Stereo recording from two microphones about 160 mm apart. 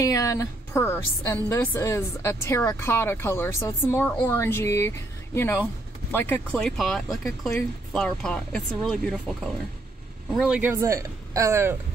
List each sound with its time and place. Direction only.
0.0 s a woman's voice: 20° left (ahead or behind); by 11.7 s 15° right (ahead or behind)